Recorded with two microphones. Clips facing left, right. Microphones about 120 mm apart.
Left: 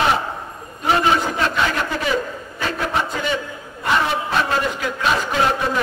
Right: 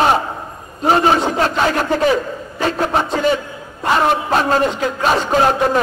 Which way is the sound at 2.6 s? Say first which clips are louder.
Right 5 dB; 35° right (ahead or behind).